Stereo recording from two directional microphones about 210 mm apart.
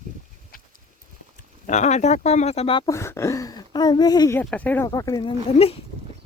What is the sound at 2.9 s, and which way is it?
Speech, 15° left (ahead or behind).